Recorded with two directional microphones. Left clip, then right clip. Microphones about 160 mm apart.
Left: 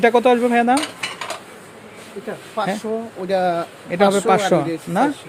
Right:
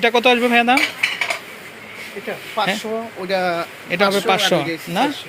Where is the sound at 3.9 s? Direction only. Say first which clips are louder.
Left 1 dB; 20° left (ahead or behind).